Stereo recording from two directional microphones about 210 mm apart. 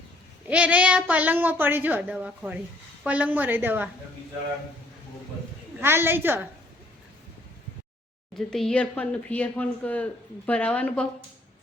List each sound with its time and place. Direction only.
0.4 s a woman's voice: 5° right (ahead or behind)
5.8 s a woman's voice: 10° right (ahead or behind)
8.4 s speech: centre (ahead or behind)